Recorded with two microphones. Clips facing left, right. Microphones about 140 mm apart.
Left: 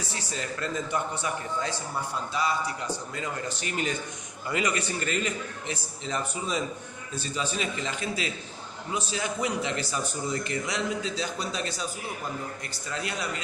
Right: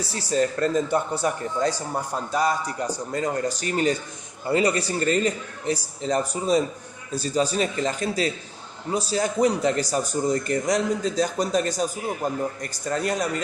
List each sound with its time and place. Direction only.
0.1 s a man's voice: 35° right (ahead or behind)